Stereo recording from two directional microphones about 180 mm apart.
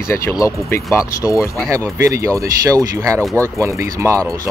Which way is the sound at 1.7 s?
15° right (ahead or behind).